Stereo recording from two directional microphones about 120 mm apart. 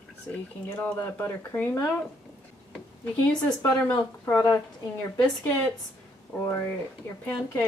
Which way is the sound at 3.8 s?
25° left (ahead or behind).